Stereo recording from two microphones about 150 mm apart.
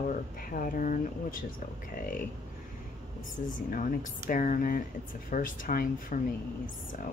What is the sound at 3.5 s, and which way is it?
Speech, 65° left (ahead or behind).